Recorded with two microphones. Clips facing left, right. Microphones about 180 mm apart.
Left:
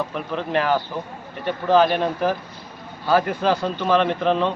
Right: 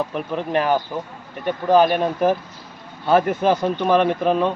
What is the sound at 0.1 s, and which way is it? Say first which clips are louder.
Speech: right 2 dB; 15° right (ahead or behind).